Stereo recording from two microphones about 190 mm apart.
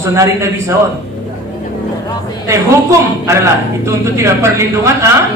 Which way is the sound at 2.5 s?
15° right (ahead or behind).